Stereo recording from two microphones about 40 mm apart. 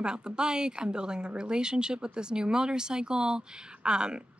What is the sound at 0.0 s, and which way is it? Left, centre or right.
Speech, right.